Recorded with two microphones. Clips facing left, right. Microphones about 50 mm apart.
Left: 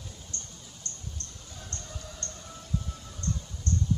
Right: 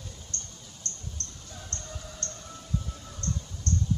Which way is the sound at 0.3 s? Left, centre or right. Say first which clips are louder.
Right 1 dB; centre.